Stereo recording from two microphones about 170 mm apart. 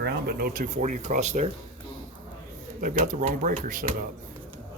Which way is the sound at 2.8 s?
55° right (ahead or behind).